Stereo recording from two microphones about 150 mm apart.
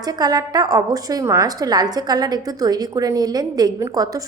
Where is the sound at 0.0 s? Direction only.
25° right (ahead or behind).